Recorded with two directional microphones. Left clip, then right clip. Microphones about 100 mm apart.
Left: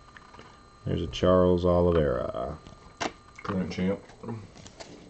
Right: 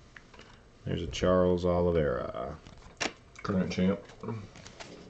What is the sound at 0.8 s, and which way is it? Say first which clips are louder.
Speech: left 4 dB; centre (ahead or behind).